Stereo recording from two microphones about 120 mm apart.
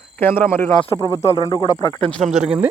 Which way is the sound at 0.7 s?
35° left (ahead or behind).